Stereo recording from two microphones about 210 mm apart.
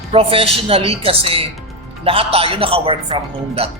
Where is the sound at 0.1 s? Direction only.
25° right (ahead or behind).